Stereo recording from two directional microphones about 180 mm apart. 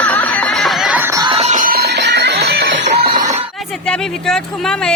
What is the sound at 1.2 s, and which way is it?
Music, 30° right (ahead or behind).